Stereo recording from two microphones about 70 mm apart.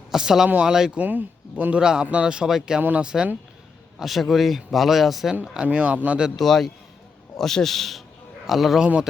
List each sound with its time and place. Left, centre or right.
0.1 s speech: centre
0.9 s speech: right
3.9 s a man's voice: centre
5.4 s speech: right
6.3 s a man's voice: centre
8.8 s speech: centre